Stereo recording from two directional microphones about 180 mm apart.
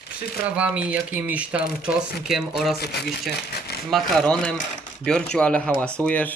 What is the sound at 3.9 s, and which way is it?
Speech, centre (ahead or behind).